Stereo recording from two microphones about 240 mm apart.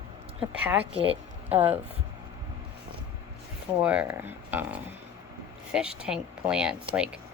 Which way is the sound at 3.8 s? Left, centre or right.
Centre.